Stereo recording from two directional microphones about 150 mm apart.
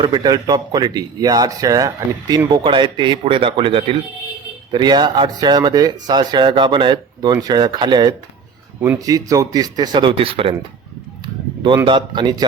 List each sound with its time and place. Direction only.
0.0 s speech: 30° right (ahead or behind)
11.9 s speech: 30° right (ahead or behind)